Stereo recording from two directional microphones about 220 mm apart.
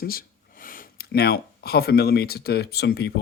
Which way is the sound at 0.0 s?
40° left (ahead or behind).